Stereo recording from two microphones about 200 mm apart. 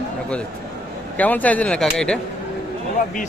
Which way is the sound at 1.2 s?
10° left (ahead or behind).